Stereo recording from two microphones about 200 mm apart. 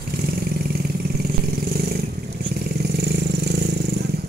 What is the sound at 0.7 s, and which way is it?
Vehicle, 50° right (ahead or behind).